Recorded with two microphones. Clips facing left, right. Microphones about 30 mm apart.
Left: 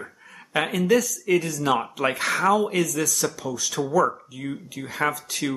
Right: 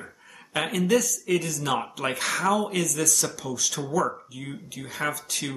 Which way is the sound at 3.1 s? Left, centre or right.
Centre.